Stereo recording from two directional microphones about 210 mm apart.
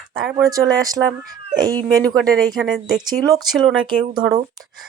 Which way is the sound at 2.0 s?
5° left (ahead or behind).